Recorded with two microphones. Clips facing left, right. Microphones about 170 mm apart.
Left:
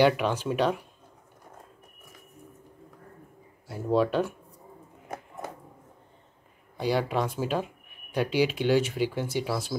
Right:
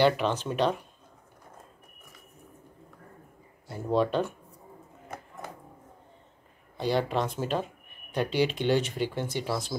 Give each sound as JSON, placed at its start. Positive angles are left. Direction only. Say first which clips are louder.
{"t": 0.0, "sound": "speech", "louder": "left 1 dB", "side_deg": 10}
{"t": 3.9, "sound": "speech", "louder": "left 1 dB", "side_deg": 5}
{"t": 6.8, "sound": "speech", "louder": "left 1 dB", "side_deg": 10}